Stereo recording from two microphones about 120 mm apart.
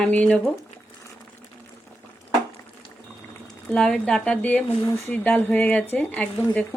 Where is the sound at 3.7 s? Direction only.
5° left (ahead or behind).